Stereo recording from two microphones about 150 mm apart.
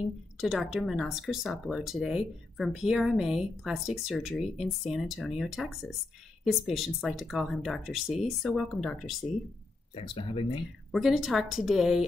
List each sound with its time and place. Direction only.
0.4 s speech: centre (ahead or behind)
9.9 s speech: 35° left (ahead or behind)
10.9 s speech: centre (ahead or behind)